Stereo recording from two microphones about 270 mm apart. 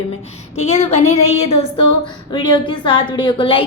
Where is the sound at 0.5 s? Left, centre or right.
Left.